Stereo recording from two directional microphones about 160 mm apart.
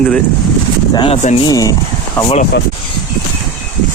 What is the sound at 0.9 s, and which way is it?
Speech, 35° left (ahead or behind).